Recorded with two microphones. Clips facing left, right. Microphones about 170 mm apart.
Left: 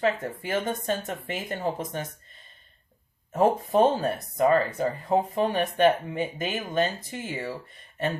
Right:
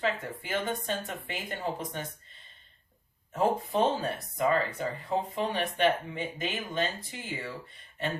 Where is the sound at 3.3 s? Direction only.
45° left (ahead or behind).